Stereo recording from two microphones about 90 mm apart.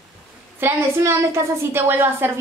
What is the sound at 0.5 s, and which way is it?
A woman's voice, 30° right (ahead or behind).